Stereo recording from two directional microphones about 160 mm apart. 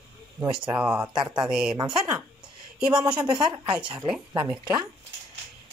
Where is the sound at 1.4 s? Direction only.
5° right (ahead or behind).